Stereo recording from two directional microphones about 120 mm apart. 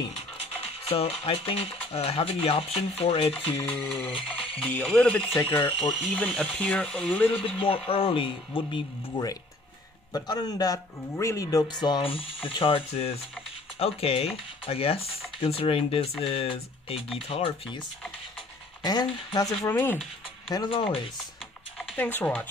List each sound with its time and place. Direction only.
0.8 s speech: 55° left (ahead or behind)
3.5 s speech: 20° left (ahead or behind)
7.3 s speech: 50° left (ahead or behind)
10.1 s speech: 35° left (ahead or behind)
11.7 s speech: 35° left (ahead or behind)
18.8 s speech: 35° left (ahead or behind)
19.6 s speech: 15° left (ahead or behind)
20.5 s speech: 40° left (ahead or behind)
21.9 s speech: 15° left (ahead or behind)